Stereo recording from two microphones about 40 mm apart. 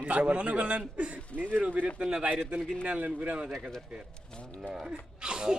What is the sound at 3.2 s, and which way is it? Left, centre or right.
Speech, right.